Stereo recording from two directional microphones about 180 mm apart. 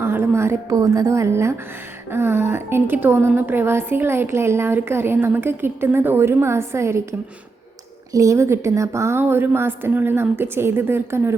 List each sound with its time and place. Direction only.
0.0 s a woman's voice: 10° right (ahead or behind)